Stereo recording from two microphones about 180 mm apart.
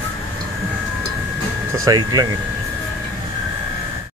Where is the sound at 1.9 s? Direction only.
20° right (ahead or behind).